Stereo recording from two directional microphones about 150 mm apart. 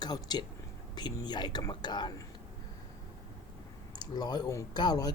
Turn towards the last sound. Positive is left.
turn(degrees=25)  # may be behind; listen again after turning